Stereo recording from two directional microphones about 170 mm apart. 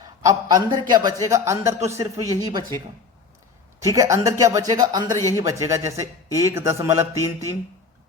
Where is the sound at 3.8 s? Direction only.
20° right (ahead or behind).